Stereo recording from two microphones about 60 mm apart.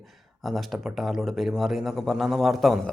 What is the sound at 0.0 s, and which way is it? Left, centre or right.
Speech, centre.